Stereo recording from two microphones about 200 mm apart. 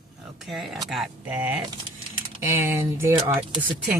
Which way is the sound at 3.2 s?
25° right (ahead or behind).